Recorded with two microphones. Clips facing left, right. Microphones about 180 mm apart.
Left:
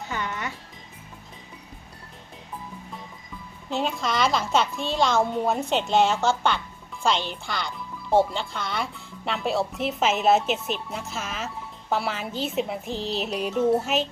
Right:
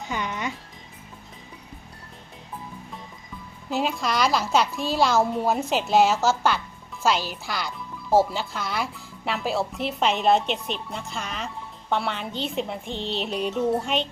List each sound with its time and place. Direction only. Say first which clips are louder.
0.0 s music: right 2 dB; 20° right (ahead or behind)
3.7 s speech: right 1 dB; 5° right (ahead or behind)